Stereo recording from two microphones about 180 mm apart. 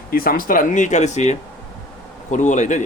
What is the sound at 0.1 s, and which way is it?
A man's voice, 55° left (ahead or behind).